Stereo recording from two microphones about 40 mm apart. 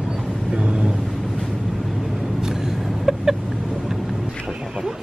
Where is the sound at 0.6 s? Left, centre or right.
Right.